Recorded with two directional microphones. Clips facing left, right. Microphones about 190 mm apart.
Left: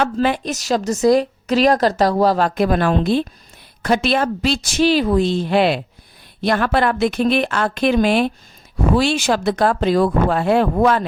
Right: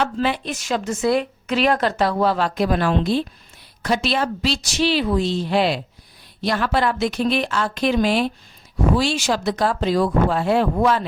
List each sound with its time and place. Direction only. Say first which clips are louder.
0.0 s a woman's voice: left 3 dB; 50° left (ahead or behind)